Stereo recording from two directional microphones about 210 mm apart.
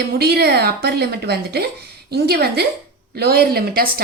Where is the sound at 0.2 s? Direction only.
50° right (ahead or behind).